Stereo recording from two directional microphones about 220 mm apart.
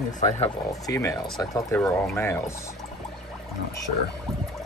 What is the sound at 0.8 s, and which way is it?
Speech, 15° left (ahead or behind).